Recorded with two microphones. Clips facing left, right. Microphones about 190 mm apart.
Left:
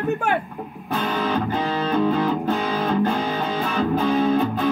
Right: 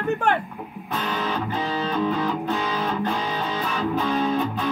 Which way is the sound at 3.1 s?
55° left (ahead or behind).